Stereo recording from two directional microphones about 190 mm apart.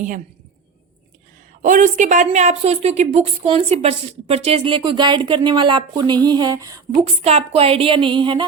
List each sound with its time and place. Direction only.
1.6 s a woman's voice: 40° right (ahead or behind); by 6.8 s 20° right (ahead or behind)
7.0 s a woman's voice: 35° right (ahead or behind)